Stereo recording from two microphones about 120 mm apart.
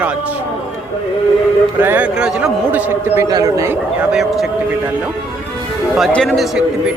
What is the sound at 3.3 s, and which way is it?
Speech, 30° right (ahead or behind).